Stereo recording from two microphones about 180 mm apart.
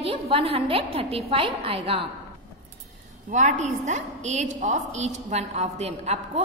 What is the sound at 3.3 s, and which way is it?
A woman's voice, 40° right (ahead or behind).